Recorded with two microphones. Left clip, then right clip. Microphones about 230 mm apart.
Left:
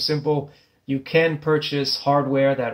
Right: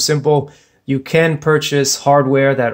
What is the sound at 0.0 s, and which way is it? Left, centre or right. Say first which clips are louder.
Speech: right 8 dB; right.